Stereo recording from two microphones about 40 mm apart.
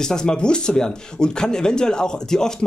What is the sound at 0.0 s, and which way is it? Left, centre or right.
Speech, centre.